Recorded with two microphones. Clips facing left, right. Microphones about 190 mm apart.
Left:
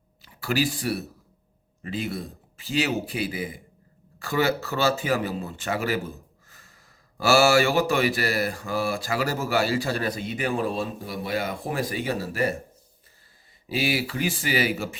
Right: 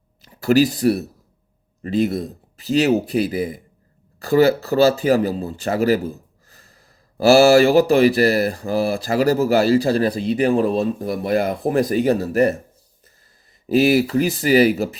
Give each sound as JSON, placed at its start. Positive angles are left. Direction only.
{"t": 0.2, "sound": "speech", "side_deg": -40}
{"t": 13.7, "sound": "speech", "side_deg": -45}